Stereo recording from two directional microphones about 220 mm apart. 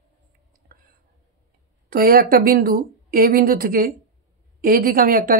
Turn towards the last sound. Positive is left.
turn(degrees=-40)  # may be behind; listen again after turning